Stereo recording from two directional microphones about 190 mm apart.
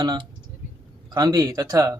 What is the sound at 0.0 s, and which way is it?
Speech, 25° right (ahead or behind).